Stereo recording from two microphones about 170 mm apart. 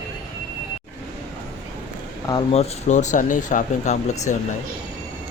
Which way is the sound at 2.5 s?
40° left (ahead or behind).